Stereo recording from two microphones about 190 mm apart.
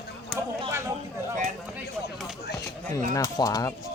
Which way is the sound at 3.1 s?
15° left (ahead or behind).